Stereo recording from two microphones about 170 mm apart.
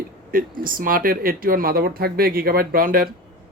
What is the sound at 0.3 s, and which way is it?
Speech, 55° right (ahead or behind).